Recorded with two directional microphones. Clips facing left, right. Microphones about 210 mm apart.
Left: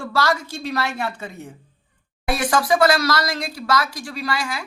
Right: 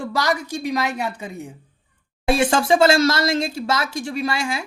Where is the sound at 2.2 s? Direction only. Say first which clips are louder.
Right 3 dB; 25° right (ahead or behind).